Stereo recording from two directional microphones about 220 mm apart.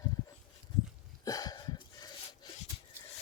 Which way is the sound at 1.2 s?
15° left (ahead or behind).